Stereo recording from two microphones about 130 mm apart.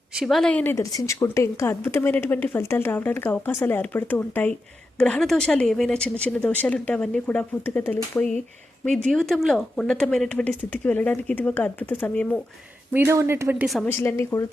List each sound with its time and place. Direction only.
0.1 s speech: centre (ahead or behind)
0.8 s speech: 25° left (ahead or behind); by 12.4 s 10° left (ahead or behind)
12.9 s speech: 15° right (ahead or behind)
13.8 s speech: 15° left (ahead or behind)